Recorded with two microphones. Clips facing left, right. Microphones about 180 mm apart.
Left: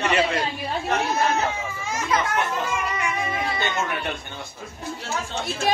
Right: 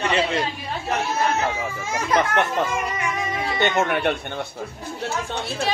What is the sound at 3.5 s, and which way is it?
Speech, 70° right (ahead or behind).